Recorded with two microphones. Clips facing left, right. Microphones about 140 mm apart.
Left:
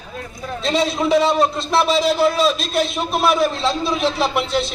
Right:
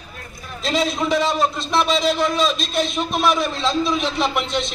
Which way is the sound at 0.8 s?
Centre (ahead or behind).